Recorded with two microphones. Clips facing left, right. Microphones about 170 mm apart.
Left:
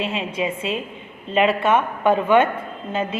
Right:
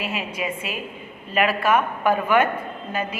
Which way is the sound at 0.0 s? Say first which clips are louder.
Left 4 dB; 25° left (ahead or behind).